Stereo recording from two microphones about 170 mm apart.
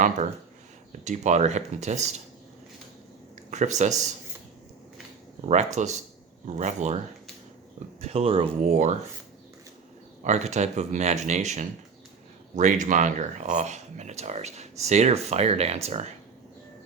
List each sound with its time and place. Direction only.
1.0 s speech: 45° right (ahead or behind)
3.5 s speech: 45° right (ahead or behind)
5.5 s speech: 45° right (ahead or behind)
8.0 s speech: 35° right (ahead or behind)
10.2 s speech: 45° right (ahead or behind)